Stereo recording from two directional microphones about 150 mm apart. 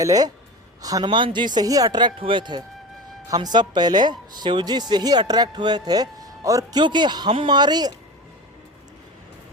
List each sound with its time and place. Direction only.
0.0 s a woman's voice: 25° right (ahead or behind)